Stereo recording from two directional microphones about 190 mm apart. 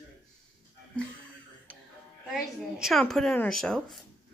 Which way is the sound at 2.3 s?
Centre (ahead or behind).